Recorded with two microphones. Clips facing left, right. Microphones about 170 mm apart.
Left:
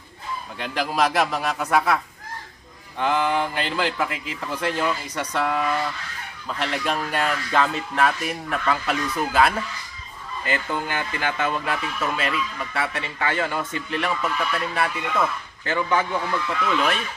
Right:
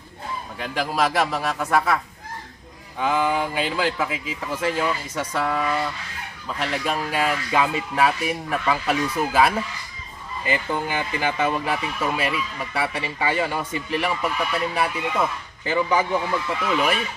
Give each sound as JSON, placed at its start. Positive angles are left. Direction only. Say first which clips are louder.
{"t": 0.6, "sound": "speech", "louder": "even", "side_deg": 0}
{"t": 3.0, "sound": "speech", "louder": "even", "side_deg": -5}